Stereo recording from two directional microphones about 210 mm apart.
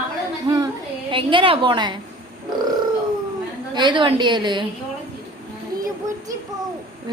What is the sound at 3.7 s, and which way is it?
Speech, 20° right (ahead or behind).